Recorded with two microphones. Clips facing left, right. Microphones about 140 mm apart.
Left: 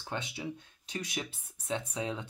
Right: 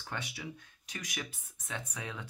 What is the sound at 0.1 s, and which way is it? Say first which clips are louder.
Speech: left 4 dB; 25° left (ahead or behind).